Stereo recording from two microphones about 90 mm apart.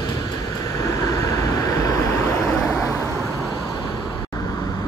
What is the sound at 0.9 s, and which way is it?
Vehicle, 40° left (ahead or behind).